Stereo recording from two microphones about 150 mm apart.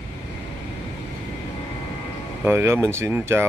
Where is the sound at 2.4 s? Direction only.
15° right (ahead or behind).